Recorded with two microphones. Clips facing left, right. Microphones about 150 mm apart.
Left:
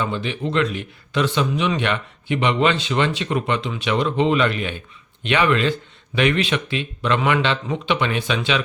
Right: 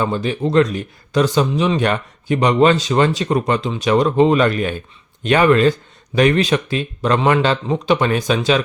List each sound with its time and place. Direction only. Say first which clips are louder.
0.0 s a man's voice: right 5 dB; 40° right (ahead or behind)